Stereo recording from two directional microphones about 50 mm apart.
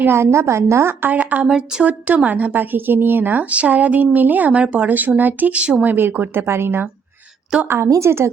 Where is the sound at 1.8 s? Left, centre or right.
Right.